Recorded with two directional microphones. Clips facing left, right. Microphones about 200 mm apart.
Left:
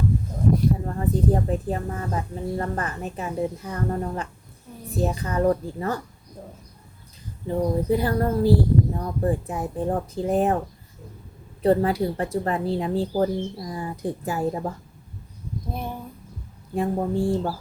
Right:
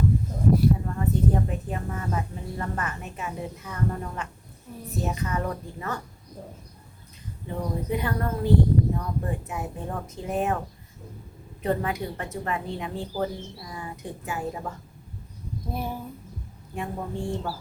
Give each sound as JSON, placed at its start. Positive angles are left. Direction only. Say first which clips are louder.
{"t": 0.9, "sound": "a woman's voice", "louder": "left 2 dB", "side_deg": 35}
{"t": 7.4, "sound": "a woman's voice", "louder": "left 7 dB", "side_deg": 35}
{"t": 11.6, "sound": "a woman's voice", "louder": "left 7 dB", "side_deg": 35}
{"t": 15.7, "sound": "speech", "louder": "right 1 dB", "side_deg": 0}
{"t": 16.7, "sound": "a woman's voice", "louder": "left 8 dB", "side_deg": 35}